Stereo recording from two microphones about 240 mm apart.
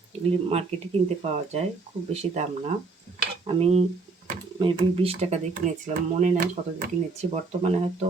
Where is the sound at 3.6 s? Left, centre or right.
Right.